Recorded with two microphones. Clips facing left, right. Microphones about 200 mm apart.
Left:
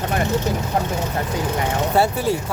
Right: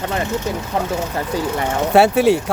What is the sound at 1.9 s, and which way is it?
Speech, 75° right (ahead or behind).